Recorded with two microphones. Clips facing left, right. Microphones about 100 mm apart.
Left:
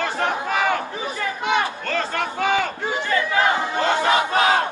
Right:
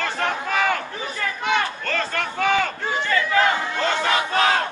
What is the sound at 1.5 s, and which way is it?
Crowd, 15° left (ahead or behind).